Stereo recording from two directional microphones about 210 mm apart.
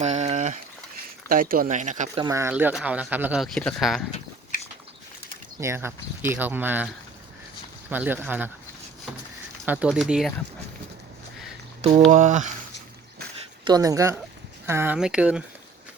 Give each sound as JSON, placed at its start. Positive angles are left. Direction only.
{"t": 0.0, "sound": "a sound", "side_deg": -30}
{"t": 1.3, "sound": "speech", "side_deg": -40}
{"t": 2.2, "sound": "speech", "side_deg": -15}
{"t": 4.5, "sound": "biting", "side_deg": 40}
{"t": 5.5, "sound": "speech", "side_deg": -10}
{"t": 7.9, "sound": "speech", "side_deg": -10}
{"t": 9.6, "sound": "speech", "side_deg": -5}
{"t": 11.8, "sound": "speech", "side_deg": -35}
{"t": 13.7, "sound": "speech", "side_deg": -15}